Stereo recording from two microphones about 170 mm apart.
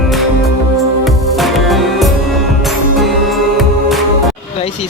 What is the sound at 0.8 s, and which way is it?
Music, centre (ahead or behind).